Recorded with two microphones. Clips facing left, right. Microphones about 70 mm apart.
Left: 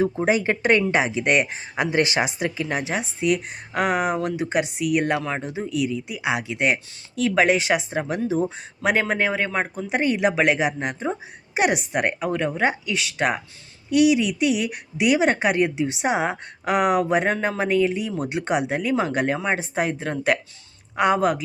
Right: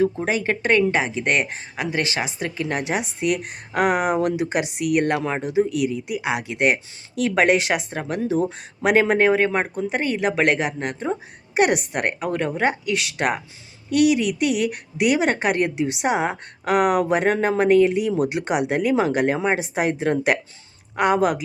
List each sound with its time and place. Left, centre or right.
0.0 s speech: centre
1.7 s speech: left
2.6 s speech: centre
9.9 s speech: centre
10.3 s speech: centre